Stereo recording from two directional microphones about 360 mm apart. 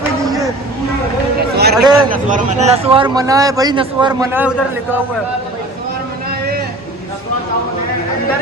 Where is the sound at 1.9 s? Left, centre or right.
Centre.